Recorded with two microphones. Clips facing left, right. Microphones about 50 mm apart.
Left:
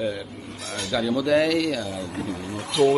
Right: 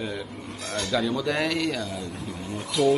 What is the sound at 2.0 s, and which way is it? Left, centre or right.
Speech, left.